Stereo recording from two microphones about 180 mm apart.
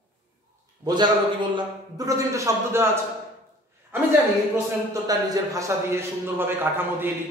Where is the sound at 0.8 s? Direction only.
25° right (ahead or behind).